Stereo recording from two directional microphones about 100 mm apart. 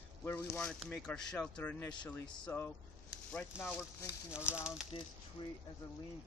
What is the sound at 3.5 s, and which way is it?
Speech, 20° left (ahead or behind).